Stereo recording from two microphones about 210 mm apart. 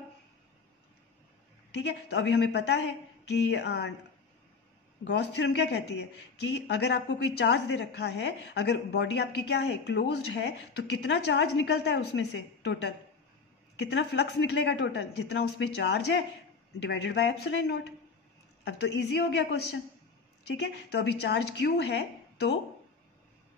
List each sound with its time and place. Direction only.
1.8 s speech: 55° left (ahead or behind)
5.0 s a woman's voice: 55° left (ahead or behind)